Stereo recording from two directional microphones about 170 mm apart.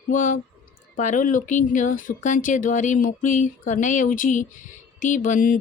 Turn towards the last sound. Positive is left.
turn(degrees=50)  # may be behind; listen again after turning